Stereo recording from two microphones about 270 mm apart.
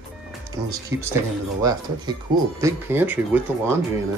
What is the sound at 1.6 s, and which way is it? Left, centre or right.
Speech, centre.